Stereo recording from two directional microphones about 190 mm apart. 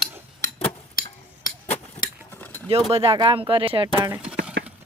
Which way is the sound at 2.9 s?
30° right (ahead or behind).